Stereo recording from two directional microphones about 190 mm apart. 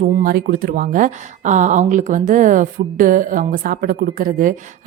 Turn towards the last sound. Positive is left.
turn(degrees=-45)  # may be behind; listen again after turning